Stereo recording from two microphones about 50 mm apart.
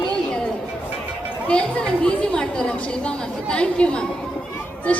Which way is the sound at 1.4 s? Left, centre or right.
Left.